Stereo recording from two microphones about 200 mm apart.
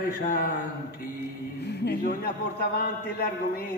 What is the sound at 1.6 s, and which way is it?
A man's voice, 55° left (ahead or behind).